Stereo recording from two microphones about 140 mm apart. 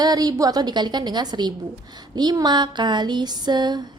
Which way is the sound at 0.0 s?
30° right (ahead or behind).